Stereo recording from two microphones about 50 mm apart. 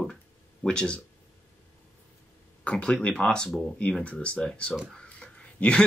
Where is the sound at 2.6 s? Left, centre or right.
Centre.